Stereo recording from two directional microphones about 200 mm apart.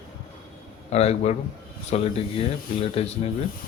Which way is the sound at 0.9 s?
30° left (ahead or behind).